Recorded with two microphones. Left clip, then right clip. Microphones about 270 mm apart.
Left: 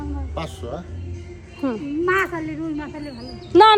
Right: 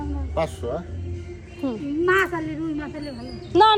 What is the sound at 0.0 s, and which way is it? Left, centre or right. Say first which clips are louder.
Music: right 4 dB; centre.